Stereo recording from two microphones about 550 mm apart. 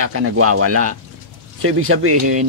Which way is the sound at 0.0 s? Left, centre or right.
Right.